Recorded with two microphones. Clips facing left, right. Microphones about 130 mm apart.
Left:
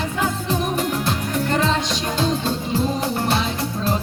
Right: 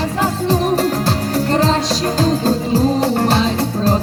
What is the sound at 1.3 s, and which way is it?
Music, 35° right (ahead or behind).